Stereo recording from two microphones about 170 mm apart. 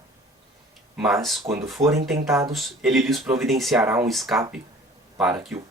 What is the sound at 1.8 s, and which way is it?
Speech, 40° right (ahead or behind).